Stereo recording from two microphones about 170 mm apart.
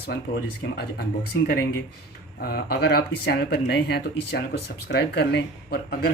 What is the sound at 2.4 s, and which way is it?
Speech, 70° left (ahead or behind).